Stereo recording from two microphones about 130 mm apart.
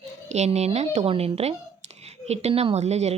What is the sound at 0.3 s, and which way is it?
A woman's voice, 60° right (ahead or behind).